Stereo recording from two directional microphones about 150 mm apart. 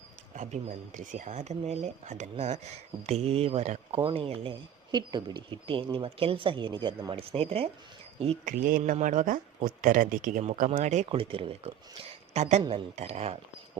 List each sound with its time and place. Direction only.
0.3 s speech: 55° right (ahead or behind)
8.4 s speech: 70° right (ahead or behind)
8.8 s speech: 55° right (ahead or behind)